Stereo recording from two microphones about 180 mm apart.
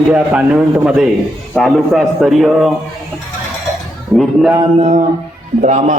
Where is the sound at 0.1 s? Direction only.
5° right (ahead or behind).